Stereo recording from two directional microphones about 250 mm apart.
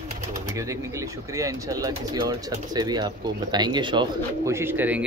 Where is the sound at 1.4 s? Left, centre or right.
Centre.